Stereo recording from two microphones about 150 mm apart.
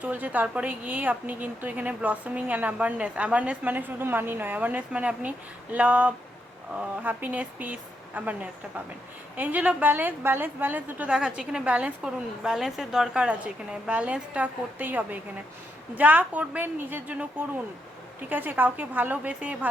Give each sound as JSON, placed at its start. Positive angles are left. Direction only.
{"t": 0.0, "sound": "a woman's voice", "side_deg": -10}
{"t": 18.3, "sound": "a woman's voice", "side_deg": -10}